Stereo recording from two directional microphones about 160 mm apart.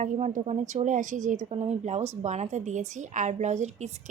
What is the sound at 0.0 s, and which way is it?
A woman's voice, 50° right (ahead or behind).